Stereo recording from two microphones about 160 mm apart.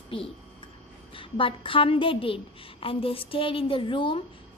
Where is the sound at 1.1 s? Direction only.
35° left (ahead or behind).